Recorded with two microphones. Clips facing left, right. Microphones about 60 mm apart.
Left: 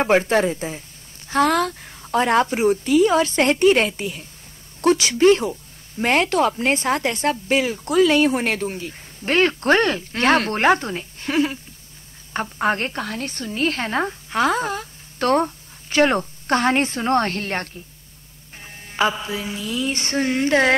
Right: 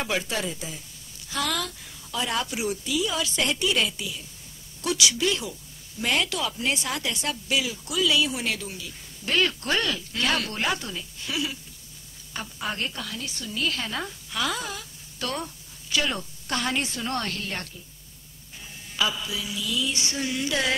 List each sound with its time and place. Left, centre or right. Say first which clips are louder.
0.0 s a woman's voice: left 11 dB; left